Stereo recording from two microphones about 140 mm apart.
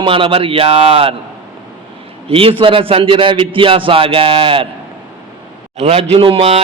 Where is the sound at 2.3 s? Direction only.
40° right (ahead or behind).